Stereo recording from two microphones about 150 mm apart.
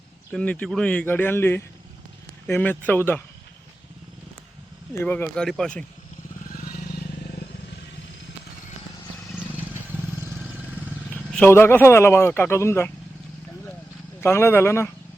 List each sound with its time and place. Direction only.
0.3 s speech: 5° left (ahead or behind)
4.9 s speech: 10° left (ahead or behind)
6.5 s vehicle: 70° left (ahead or behind)
11.1 s speech: 10° left (ahead or behind)
14.2 s speech: 15° left (ahead or behind)